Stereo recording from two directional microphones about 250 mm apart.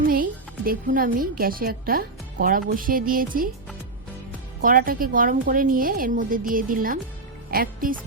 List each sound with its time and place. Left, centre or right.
0.1 s a woman's voice: right
4.6 s a woman's voice: right